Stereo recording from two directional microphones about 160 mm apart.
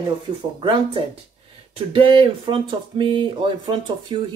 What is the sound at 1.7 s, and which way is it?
Speech, 35° right (ahead or behind).